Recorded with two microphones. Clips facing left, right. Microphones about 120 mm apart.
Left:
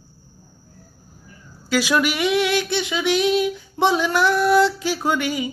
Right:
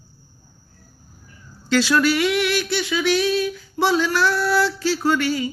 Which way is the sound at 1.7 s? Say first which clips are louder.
Right 2 dB; 15° left (ahead or behind).